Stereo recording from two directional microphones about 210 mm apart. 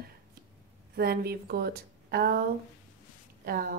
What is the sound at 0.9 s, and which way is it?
A woman's voice, 50° right (ahead or behind).